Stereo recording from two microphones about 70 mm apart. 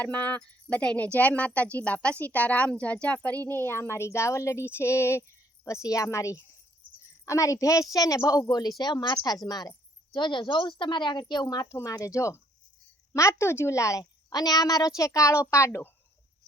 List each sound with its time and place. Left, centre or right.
0.0 s a woman's voice: left
8.8 s speech: left
9.2 s a woman's voice: left
10.2 s speech: left
11.7 s a woman's voice: left
14.0 s a woman's voice: left